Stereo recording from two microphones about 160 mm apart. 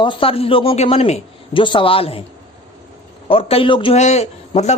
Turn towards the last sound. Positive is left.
turn(degrees=45)  # may be behind; listen again after turning